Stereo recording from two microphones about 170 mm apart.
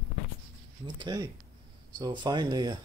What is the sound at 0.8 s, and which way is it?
Speech, 25° right (ahead or behind).